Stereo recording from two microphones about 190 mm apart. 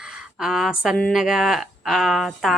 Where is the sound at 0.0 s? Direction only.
5° right (ahead or behind).